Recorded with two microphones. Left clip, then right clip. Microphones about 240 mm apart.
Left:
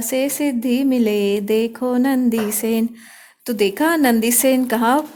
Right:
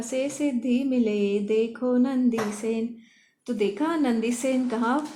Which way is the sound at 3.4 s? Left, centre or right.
Left.